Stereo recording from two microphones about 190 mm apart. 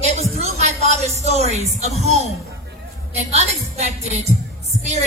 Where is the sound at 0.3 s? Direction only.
35° right (ahead or behind).